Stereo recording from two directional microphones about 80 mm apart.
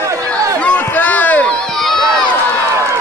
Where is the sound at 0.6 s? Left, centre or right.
Centre.